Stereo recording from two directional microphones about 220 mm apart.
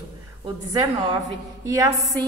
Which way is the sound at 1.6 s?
15° right (ahead or behind).